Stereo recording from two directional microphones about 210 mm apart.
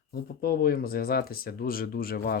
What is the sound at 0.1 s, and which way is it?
Speech, 45° left (ahead or behind).